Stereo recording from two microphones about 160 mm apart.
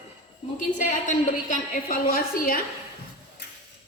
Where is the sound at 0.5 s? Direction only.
55° left (ahead or behind).